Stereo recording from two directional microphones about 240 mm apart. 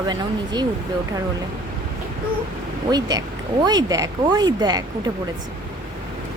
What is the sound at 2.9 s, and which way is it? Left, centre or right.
Speech, centre.